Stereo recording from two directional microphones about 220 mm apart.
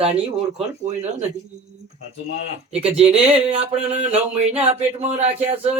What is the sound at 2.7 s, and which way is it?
Speech, 30° right (ahead or behind).